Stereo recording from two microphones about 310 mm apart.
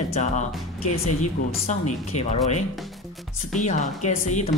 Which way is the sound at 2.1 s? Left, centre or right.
Left.